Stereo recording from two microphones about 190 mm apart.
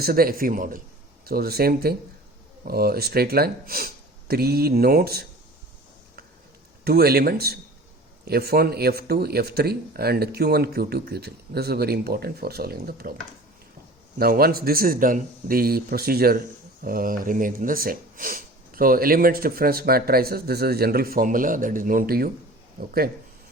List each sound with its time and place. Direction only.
0.0 s speech: 50° right (ahead or behind)
6.8 s speech: 55° right (ahead or behind)
14.2 s speech: 55° right (ahead or behind)